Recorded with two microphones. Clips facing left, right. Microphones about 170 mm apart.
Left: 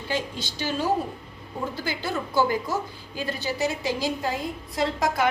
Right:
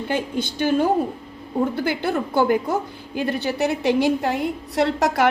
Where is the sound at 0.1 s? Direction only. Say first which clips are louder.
Right 4 dB; 55° right (ahead or behind).